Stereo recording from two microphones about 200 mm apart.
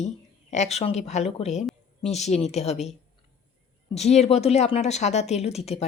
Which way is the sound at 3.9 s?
35° left (ahead or behind).